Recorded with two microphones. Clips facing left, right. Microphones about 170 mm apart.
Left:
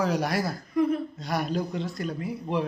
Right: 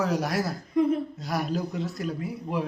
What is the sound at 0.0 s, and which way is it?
Speech, centre (ahead or behind).